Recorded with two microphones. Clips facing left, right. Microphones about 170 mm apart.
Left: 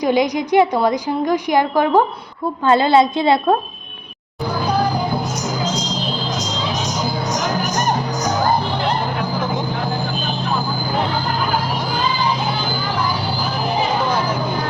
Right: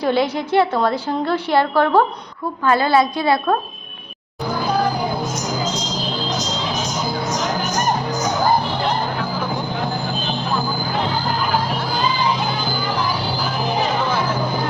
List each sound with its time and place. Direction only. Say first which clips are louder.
0.0 s a woman's voice: left 2 dB; 15° left (ahead or behind)